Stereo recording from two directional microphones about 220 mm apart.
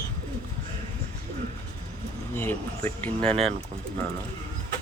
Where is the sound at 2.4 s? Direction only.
10° left (ahead or behind).